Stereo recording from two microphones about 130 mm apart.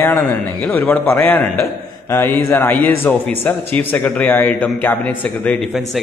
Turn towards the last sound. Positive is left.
turn(degrees=10)  # may be behind; listen again after turning